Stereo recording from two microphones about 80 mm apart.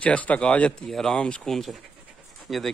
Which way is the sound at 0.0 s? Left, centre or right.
Centre.